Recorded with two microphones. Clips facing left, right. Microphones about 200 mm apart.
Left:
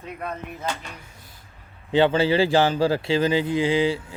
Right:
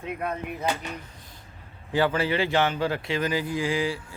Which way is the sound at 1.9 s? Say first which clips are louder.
Left 5 dB; 25° left (ahead or behind).